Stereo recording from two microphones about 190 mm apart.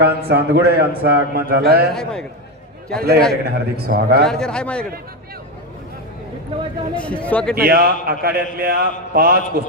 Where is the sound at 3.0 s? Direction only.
55° right (ahead or behind).